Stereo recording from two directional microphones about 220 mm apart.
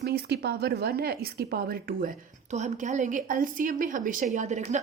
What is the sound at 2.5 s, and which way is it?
Speech, 35° right (ahead or behind).